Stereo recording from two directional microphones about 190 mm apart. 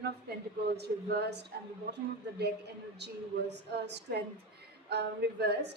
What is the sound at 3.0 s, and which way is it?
A woman's voice, 65° right (ahead or behind).